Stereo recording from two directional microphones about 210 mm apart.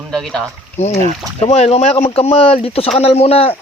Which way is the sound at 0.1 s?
5° left (ahead or behind).